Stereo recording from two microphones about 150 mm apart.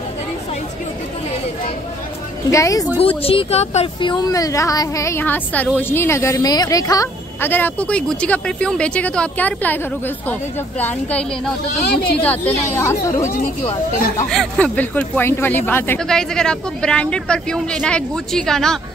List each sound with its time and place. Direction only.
2.5 s a woman's voice: 20° left (ahead or behind)
3.2 s speech: 40° left (ahead or behind)
4.3 s a woman's voice: 20° left (ahead or behind)
14.3 s speech: 5° left (ahead or behind)
16.0 s speech: 5° left (ahead or behind)